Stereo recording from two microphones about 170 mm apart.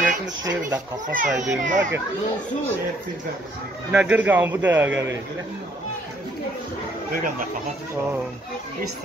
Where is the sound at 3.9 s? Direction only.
5° right (ahead or behind).